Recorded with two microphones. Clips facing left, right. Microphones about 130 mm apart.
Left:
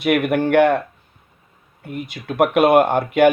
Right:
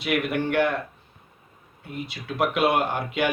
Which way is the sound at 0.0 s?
55° left (ahead or behind).